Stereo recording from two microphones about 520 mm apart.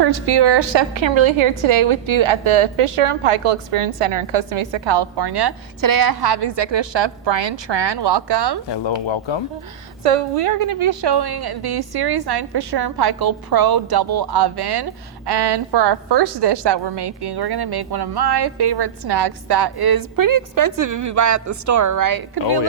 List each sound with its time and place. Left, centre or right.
0.0 s a woman's voice: right
8.7 s speech: left
10.0 s a woman's voice: right